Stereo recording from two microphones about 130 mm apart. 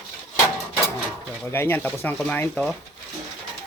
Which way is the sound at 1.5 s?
15° left (ahead or behind).